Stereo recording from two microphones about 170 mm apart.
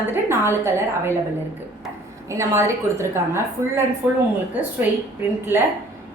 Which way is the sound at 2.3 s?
15° right (ahead or behind).